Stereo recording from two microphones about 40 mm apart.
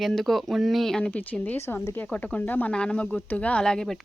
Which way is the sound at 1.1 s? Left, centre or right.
Left.